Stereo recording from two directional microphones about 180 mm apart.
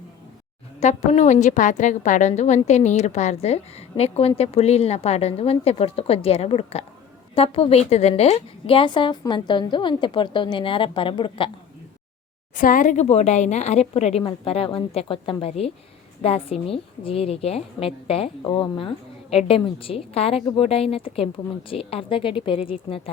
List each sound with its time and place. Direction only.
0.8 s a woman's voice: 40° left (ahead or behind)
12.5 s a woman's voice: 45° left (ahead or behind); by 23.0 s 30° left (ahead or behind)